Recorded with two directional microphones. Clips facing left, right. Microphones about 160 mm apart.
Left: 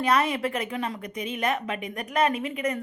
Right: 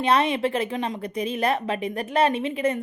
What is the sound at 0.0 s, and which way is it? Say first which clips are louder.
A woman's voice: right 3 dB; 25° right (ahead or behind).